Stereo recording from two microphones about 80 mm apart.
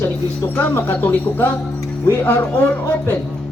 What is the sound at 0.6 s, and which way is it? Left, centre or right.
Music, left.